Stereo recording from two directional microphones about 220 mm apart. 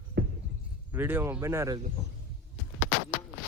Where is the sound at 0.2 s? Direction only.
50° right (ahead or behind).